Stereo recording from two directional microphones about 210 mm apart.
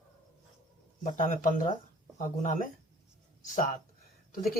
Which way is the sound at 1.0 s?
35° left (ahead or behind).